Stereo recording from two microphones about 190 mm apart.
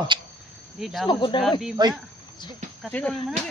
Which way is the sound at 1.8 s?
25° right (ahead or behind).